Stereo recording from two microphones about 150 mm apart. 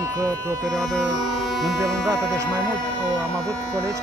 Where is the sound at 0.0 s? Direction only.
25° right (ahead or behind).